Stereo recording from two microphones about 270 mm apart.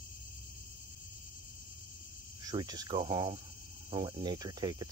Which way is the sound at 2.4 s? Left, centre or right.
Centre.